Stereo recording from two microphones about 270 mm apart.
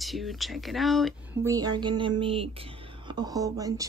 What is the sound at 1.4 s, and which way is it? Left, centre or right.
Speech, centre.